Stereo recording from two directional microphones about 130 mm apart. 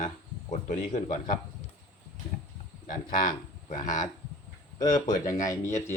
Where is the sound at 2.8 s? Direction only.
90° left.